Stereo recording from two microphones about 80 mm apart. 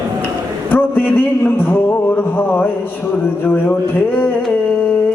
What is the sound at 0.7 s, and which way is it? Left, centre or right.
A man's voice, left.